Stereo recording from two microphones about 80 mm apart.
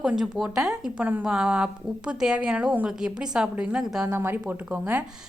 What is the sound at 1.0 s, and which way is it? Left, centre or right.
Speech, right.